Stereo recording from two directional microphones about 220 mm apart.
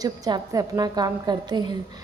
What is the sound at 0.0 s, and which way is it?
A woman's voice, 20° right (ahead or behind).